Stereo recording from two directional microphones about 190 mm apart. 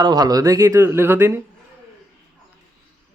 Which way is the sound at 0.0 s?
20° right (ahead or behind).